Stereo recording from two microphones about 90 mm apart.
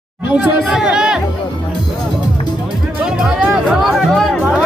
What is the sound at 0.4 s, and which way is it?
Speech, 10° right (ahead or behind).